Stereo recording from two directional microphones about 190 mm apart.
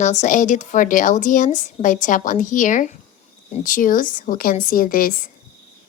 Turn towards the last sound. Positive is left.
turn(degrees=50)  # may be behind; listen again after turning